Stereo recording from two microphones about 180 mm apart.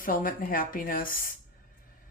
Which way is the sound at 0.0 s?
50° left (ahead or behind).